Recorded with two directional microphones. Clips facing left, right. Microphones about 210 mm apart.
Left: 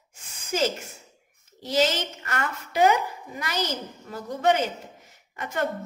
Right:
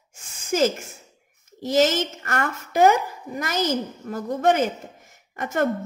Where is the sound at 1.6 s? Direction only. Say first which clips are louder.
Right 4 dB; 45° right (ahead or behind).